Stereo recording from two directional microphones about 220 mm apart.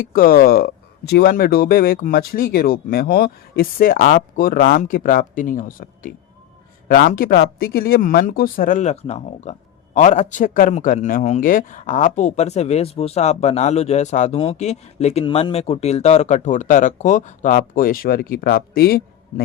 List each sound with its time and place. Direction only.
0.1 s speech: 40° left (ahead or behind)